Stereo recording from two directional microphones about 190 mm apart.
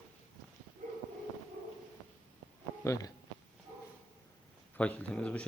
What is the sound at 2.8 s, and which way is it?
Speech, 15° left (ahead or behind).